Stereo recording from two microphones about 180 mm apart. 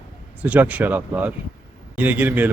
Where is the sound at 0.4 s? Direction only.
10° right (ahead or behind).